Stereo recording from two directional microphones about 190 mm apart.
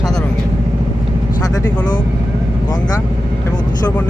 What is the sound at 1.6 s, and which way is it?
Speech, 20° left (ahead or behind).